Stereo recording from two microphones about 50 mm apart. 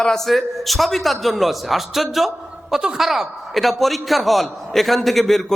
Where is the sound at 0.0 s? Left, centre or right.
Centre.